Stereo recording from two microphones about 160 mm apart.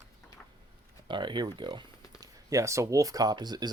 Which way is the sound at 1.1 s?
30° right (ahead or behind).